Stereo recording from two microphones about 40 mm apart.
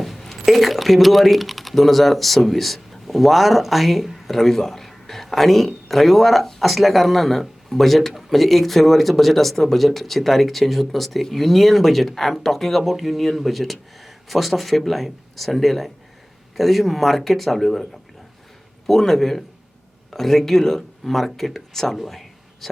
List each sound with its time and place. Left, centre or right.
0.0 s speech: centre
18.9 s speech: centre
21.9 s a sound: centre